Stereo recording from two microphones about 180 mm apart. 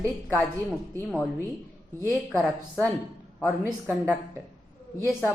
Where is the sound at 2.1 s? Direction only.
Centre (ahead or behind).